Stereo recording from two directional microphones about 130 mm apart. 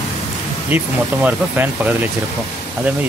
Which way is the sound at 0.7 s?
15° right (ahead or behind).